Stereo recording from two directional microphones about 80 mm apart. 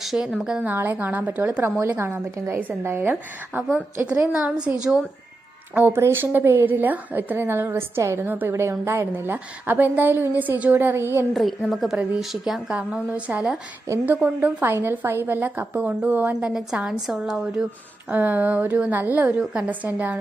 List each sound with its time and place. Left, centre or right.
0.0 s a woman's voice: centre
0.7 s a woman's voice: right
1.8 s a woman's voice: right
4.3 s a woman's voice: centre
5.7 s a woman's voice: right
11.3 s a woman's voice: centre
12.7 s a woman's voice: centre
18.1 s a woman's voice: right